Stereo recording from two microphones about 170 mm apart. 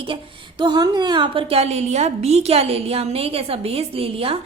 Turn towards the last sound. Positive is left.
turn(degrees=-35)  # may be behind; listen again after turning